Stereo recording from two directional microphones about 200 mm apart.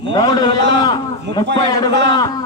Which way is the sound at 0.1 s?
20° left (ahead or behind).